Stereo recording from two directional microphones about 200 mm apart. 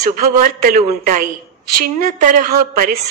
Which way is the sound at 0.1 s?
45° right (ahead or behind).